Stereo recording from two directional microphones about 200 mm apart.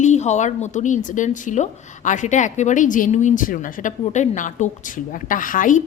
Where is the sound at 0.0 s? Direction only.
35° left (ahead or behind).